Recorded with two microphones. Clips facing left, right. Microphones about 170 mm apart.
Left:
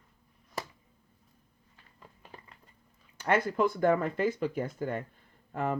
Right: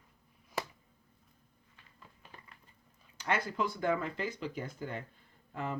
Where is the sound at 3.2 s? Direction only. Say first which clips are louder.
Left 7 dB; 55° left (ahead or behind).